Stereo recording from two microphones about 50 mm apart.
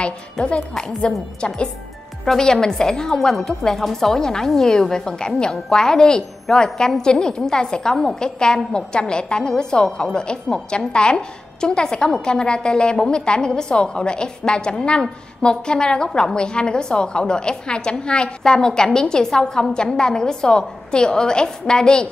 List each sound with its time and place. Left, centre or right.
0.0 s a woman's voice: left
2.2 s a woman's voice: centre